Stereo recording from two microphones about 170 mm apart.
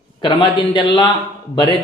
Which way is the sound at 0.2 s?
30° left (ahead or behind).